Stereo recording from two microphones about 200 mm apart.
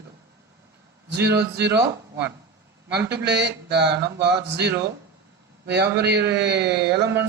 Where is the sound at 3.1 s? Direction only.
55° right (ahead or behind).